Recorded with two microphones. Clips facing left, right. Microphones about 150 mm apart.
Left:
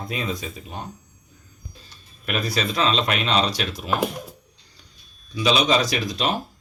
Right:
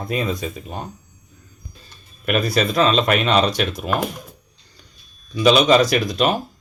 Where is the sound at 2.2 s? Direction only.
55° right (ahead or behind).